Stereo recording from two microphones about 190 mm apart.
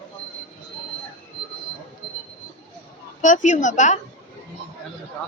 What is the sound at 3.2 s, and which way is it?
Speech, 40° left (ahead or behind).